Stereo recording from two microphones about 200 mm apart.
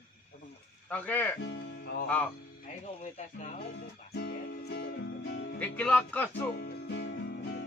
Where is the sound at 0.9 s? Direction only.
10° left (ahead or behind).